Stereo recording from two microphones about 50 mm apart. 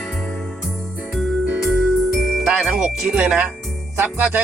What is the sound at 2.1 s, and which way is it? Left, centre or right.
Music, centre.